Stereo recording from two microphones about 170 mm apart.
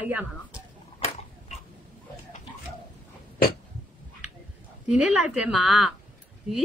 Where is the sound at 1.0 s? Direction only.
40° left (ahead or behind).